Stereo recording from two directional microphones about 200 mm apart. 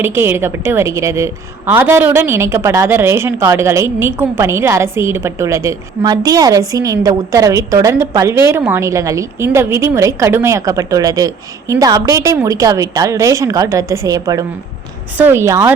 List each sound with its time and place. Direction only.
0.0 s a woman's voice: 10° right (ahead or behind)